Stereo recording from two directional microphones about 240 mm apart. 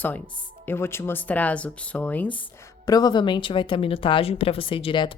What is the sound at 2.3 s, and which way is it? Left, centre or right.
A woman's voice, centre.